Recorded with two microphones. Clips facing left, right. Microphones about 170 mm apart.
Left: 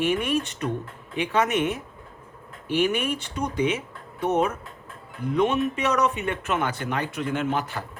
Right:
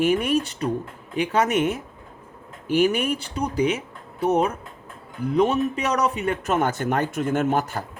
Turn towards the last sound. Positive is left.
turn(degrees=-45)  # may be behind; listen again after turning